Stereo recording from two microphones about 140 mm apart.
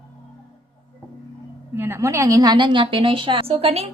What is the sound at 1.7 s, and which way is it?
A woman's voice, 15° right (ahead or behind).